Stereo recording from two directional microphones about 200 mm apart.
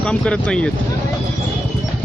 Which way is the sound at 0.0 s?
5° left (ahead or behind).